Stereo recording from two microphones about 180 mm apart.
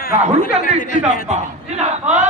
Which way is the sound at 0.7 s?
40° right (ahead or behind).